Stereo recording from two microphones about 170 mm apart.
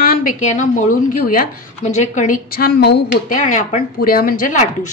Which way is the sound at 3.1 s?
50° left (ahead or behind).